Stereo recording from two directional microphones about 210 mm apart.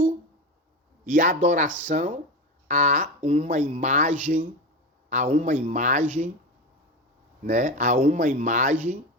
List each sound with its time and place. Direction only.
1.0 s speech: 40° right (ahead or behind)
7.4 s speech: 35° right (ahead or behind)